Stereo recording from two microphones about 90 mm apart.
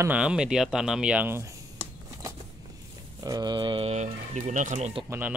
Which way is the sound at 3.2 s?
45° right (ahead or behind).